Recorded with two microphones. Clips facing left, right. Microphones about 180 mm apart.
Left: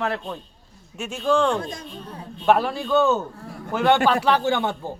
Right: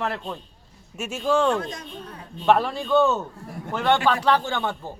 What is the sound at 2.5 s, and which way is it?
A man's voice, 5° left (ahead or behind).